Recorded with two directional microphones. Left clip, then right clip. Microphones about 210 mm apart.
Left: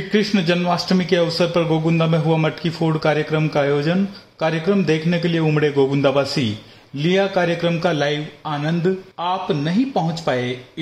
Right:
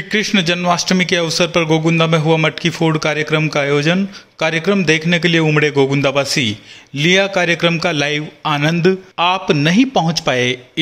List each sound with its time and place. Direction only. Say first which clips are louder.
0.1 s a man's voice: right 3 dB; 15° right (ahead or behind)